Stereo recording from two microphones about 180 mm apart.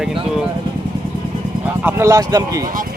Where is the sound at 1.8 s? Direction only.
15° right (ahead or behind).